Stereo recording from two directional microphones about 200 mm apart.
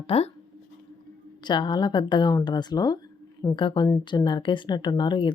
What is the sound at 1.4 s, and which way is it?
Speech, 20° left (ahead or behind).